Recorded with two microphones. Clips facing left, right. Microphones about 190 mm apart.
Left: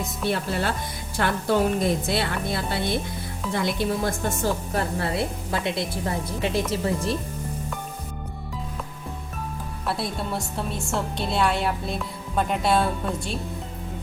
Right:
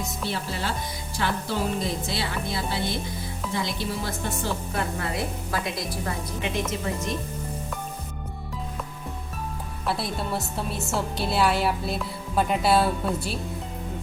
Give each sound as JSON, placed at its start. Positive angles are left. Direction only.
{"t": 0.3, "sound": "a woman's voice", "side_deg": 55}
{"t": 9.8, "sound": "a woman's voice", "side_deg": 0}